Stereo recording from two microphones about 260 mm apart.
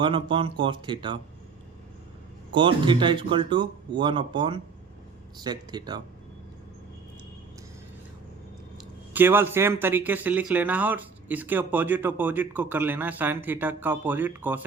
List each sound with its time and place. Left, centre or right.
0.0 s speech: centre
2.6 s speech: centre
9.1 s speech: centre